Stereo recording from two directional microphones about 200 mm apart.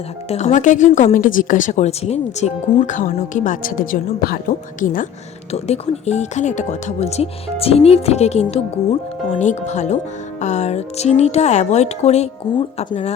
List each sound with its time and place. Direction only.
0.3 s speech: 35° left (ahead or behind)